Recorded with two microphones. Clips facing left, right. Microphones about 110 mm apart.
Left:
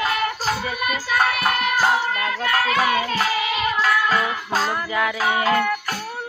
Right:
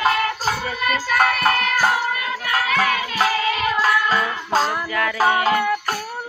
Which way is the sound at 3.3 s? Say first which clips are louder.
Right 2 dB; 15° left (ahead or behind).